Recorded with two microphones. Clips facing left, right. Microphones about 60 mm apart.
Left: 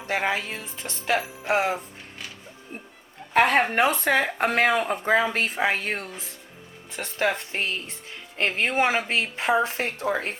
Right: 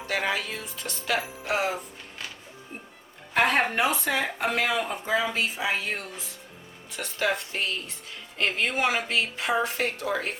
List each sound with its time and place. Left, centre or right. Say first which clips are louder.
0.1 s music: left 2 dB; left
3.3 s a woman's voice: left 3 dB; left